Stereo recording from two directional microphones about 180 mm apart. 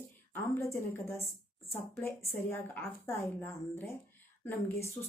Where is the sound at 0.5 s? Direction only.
15° left (ahead or behind).